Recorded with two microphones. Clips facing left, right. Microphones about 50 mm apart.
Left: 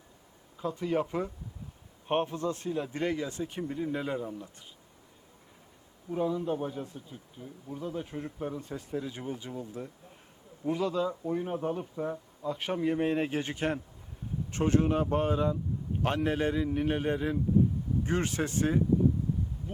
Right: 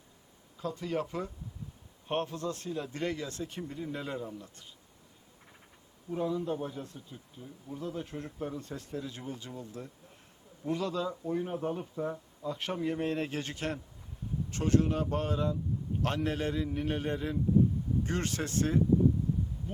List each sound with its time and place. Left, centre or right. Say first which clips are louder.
0.6 s speech: left 4 dB; centre
6.1 s speech: left 2 dB; centre